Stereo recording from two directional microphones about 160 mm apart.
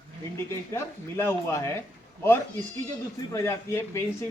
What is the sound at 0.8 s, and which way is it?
Speech, 15° left (ahead or behind).